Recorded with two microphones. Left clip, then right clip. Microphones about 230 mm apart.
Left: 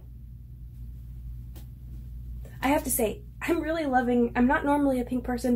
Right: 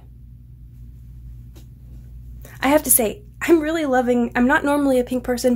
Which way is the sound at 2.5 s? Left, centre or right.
Right.